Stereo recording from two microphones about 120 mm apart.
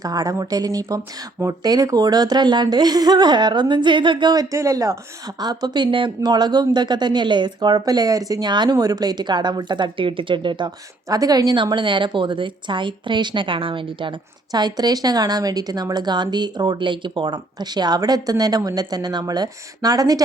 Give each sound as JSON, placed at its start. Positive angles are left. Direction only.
{"t": 0.0, "sound": "speech", "side_deg": -30}